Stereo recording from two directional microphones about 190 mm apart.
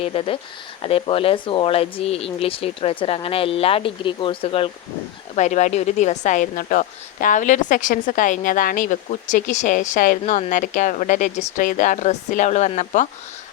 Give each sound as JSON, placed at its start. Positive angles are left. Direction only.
{"t": 0.0, "sound": "speech", "side_deg": 30}